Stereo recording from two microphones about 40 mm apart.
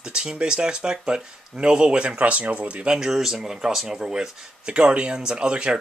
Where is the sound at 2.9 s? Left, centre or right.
Centre.